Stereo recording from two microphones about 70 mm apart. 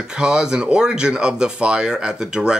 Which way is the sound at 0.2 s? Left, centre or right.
Centre.